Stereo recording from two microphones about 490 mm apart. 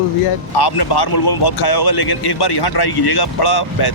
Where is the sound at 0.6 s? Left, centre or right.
Left.